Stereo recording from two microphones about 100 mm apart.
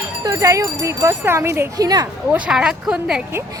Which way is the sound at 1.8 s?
40° right (ahead or behind).